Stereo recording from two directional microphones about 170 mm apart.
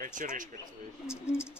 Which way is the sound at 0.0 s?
50° right (ahead or behind).